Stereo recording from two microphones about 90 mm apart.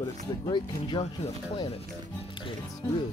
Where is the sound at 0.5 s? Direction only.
60° left (ahead or behind).